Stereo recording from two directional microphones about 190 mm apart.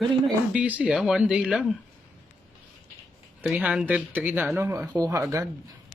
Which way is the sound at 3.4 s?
5° right (ahead or behind).